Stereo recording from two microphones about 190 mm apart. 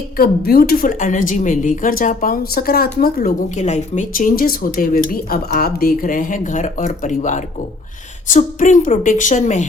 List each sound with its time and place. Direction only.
0.2 s a woman's voice: 50° left (ahead or behind)